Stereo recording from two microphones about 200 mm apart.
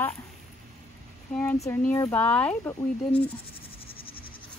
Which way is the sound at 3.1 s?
25° left (ahead or behind).